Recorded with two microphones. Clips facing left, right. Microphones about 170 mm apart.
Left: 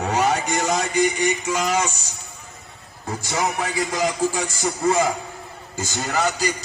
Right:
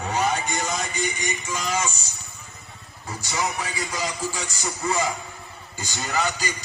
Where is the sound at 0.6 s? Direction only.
70° left (ahead or behind).